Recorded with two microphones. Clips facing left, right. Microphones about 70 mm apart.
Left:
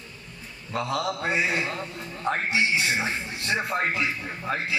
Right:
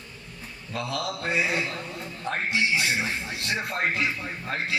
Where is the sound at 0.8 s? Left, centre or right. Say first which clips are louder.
Left 3 dB; left.